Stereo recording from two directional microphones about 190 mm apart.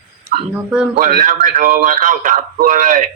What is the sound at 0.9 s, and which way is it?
A man's voice, 50° right (ahead or behind).